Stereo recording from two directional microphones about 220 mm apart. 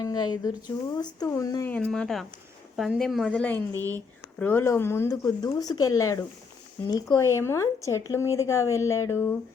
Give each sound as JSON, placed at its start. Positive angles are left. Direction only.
{"t": 0.0, "sound": "speech", "side_deg": 20}
{"t": 1.7, "sound": "speech", "side_deg": 5}